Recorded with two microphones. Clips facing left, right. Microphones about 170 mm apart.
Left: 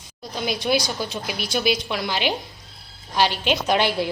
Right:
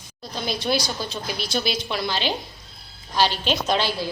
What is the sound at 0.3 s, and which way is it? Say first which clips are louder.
A woman's voice: left 2 dB; 10° left (ahead or behind).